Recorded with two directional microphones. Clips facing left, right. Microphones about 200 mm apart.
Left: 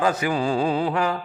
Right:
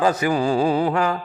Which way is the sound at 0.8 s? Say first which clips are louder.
Right 2 dB; 50° right (ahead or behind).